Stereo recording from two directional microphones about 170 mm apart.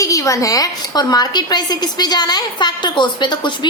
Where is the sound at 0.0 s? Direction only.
20° left (ahead or behind).